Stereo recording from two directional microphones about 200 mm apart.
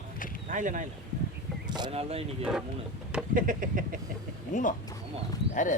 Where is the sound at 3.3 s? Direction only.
40° right (ahead or behind).